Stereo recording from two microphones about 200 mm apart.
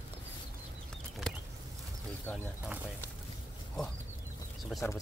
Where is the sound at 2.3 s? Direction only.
10° left (ahead or behind).